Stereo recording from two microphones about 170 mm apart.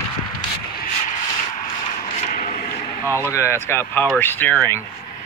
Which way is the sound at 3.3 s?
15° left (ahead or behind).